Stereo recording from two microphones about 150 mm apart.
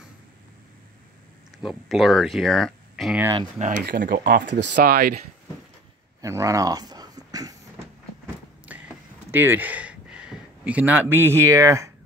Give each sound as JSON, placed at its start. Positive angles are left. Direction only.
{"t": 1.6, "sound": "speech", "side_deg": 0}
{"t": 3.8, "sound": "speech", "side_deg": -70}
{"t": 6.2, "sound": "speech", "side_deg": -20}
{"t": 8.6, "sound": "a sound", "side_deg": -10}